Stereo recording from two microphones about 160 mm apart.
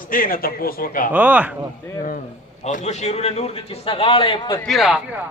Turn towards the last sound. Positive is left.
turn(degrees=0)  # may be behind; listen again after turning